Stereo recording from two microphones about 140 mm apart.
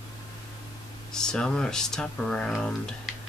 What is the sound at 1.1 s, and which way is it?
Speech, 5° left (ahead or behind).